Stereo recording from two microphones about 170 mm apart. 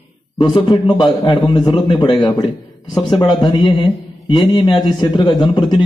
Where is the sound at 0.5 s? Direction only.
30° left (ahead or behind).